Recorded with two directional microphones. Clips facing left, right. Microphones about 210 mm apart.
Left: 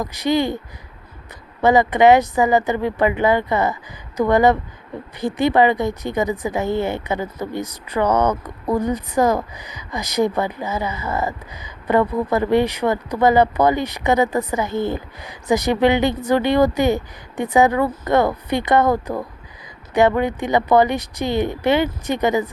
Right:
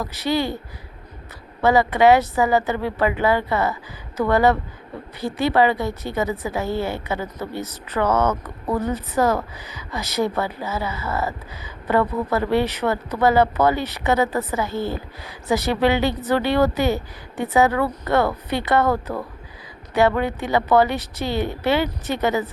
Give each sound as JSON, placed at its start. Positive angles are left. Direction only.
{"t": 0.0, "sound": "a woman's voice", "side_deg": 15}
{"t": 1.6, "sound": "a woman's voice", "side_deg": 15}